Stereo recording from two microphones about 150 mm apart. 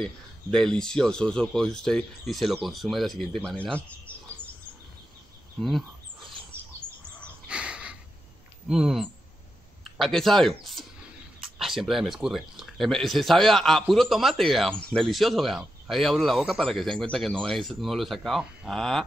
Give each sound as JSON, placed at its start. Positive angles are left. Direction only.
{"t": 0.0, "sound": "speech", "side_deg": 5}
{"t": 5.6, "sound": "speech", "side_deg": 0}
{"t": 6.8, "sound": "bird", "side_deg": -15}
{"t": 7.4, "sound": "a sound", "side_deg": -5}
{"t": 8.6, "sound": "speech", "side_deg": -5}